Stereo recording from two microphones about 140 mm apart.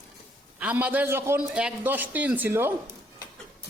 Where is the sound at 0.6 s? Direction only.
10° right (ahead or behind).